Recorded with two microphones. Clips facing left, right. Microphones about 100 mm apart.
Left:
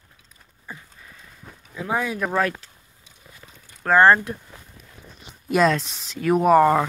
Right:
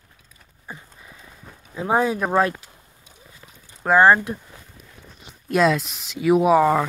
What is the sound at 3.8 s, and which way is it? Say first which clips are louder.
Speech: right 1 dB; 10° right (ahead or behind).